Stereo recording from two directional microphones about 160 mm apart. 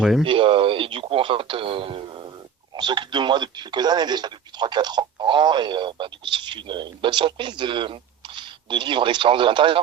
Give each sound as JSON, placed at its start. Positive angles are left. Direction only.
{"t": 0.0, "sound": "speech", "side_deg": 0}
{"t": 0.3, "sound": "a man's voice", "side_deg": -35}